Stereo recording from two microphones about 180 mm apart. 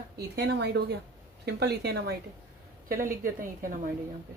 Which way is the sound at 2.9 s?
50° right (ahead or behind).